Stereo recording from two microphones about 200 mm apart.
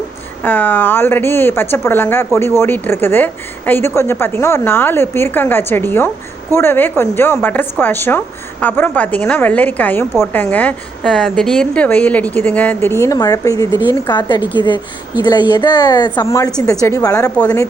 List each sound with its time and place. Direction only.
0.4 s a woman's voice: 10° left (ahead or behind)